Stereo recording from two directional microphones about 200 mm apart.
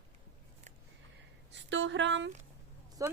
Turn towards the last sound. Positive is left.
turn(degrees=-15)  # may be behind; listen again after turning